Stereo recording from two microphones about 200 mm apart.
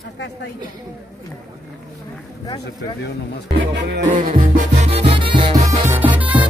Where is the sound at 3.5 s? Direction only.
60° right (ahead or behind).